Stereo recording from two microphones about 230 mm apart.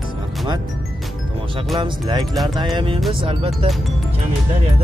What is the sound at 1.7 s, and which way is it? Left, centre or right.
Speech, centre.